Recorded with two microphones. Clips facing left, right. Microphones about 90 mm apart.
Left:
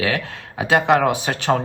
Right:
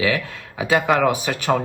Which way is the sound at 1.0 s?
35° left (ahead or behind).